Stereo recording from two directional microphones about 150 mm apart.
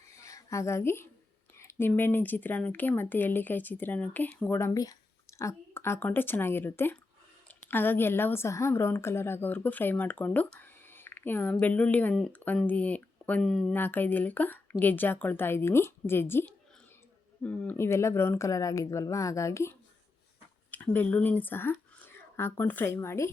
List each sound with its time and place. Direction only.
0.2 s a woman's voice: 20° left (ahead or behind); by 13.7 s centre (ahead or behind)
13.7 s a woman's voice: 15° left (ahead or behind)